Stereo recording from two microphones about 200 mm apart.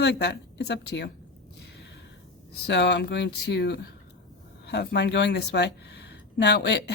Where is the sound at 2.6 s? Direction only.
60° left (ahead or behind).